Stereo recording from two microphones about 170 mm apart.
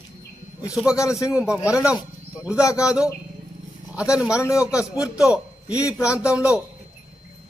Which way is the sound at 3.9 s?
5° right (ahead or behind).